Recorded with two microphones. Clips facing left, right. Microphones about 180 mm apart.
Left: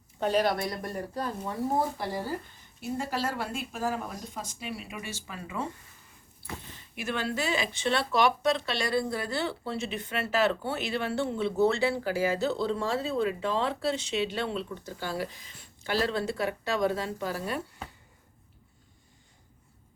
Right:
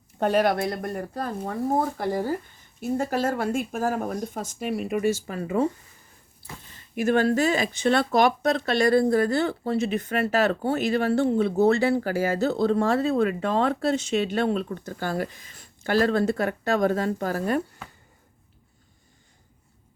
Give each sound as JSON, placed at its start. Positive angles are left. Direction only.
{"t": 0.2, "sound": "speech", "side_deg": -55}
{"t": 6.9, "sound": "speech", "side_deg": -45}